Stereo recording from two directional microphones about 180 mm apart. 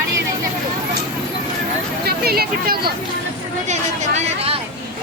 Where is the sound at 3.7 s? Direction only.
40° right (ahead or behind).